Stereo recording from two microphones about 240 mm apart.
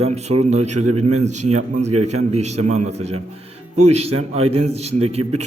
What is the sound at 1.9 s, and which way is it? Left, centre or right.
Speech, right.